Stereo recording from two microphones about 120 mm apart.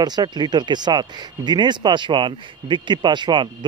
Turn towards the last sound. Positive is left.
turn(degrees=-40)  # may be behind; listen again after turning